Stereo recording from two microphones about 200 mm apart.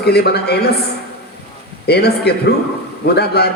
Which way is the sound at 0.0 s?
55° left (ahead or behind).